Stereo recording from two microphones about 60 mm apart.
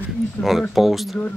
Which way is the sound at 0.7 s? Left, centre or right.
Centre.